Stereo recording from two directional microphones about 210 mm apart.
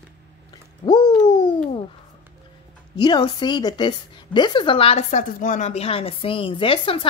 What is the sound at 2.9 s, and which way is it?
Speech, 20° left (ahead or behind).